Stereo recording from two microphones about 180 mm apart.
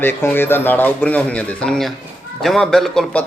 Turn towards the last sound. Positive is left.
turn(degrees=0)  # may be behind; listen again after turning